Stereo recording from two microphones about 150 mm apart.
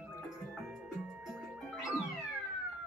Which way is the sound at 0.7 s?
5° right (ahead or behind).